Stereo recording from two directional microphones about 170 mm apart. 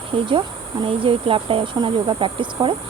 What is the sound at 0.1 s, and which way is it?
Speech, 30° right (ahead or behind).